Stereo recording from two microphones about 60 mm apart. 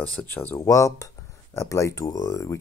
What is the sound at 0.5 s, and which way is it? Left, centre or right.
Speech, left.